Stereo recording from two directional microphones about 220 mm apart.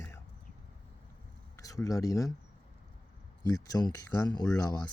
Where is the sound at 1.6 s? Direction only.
15° left (ahead or behind).